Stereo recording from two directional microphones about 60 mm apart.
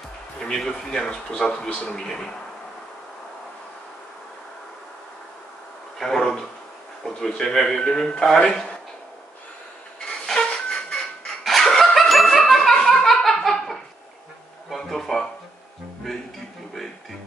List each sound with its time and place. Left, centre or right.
0.4 s a man's voice: centre
5.9 s a sound: centre
7.2 s a man's voice: centre
9.9 s train: centre
11.4 s laughter: centre
14.7 s a sound: centre